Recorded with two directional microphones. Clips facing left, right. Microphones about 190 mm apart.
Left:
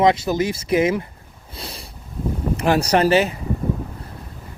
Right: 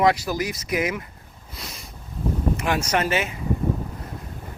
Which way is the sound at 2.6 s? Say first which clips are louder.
Left 10 dB; 35° left (ahead or behind).